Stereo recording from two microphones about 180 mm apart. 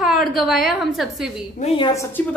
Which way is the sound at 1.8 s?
25° left (ahead or behind).